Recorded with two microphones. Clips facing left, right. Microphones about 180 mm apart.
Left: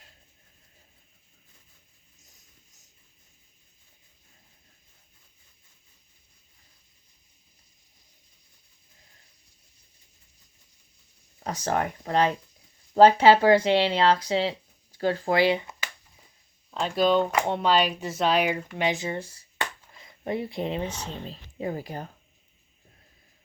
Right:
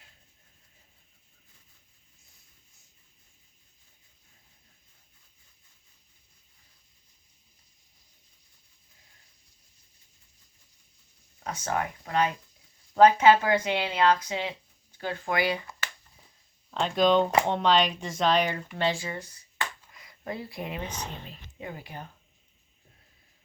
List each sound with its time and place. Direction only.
11.3 s speech: 35° left (ahead or behind)
16.8 s speech: 5° left (ahead or behind); by 22.0 s 40° left (ahead or behind)